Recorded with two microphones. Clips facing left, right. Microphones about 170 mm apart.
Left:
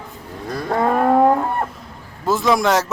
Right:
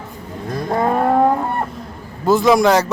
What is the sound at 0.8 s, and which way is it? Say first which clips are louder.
Vehicle: even; 5° right (ahead or behind).